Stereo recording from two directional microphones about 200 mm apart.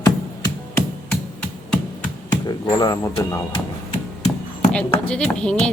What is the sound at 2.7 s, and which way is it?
Speech, 20° left (ahead or behind).